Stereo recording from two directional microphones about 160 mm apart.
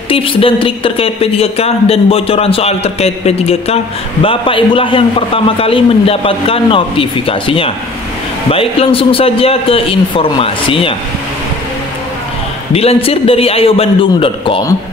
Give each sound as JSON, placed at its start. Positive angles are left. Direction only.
{"t": 0.1, "sound": "speech", "side_deg": 35}
{"t": 12.7, "sound": "speech", "side_deg": 40}